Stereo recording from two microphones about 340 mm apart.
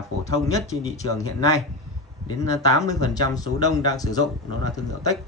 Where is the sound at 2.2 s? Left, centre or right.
Centre.